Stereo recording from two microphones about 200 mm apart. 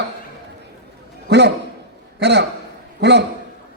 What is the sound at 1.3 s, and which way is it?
A man's voice, 60° right (ahead or behind).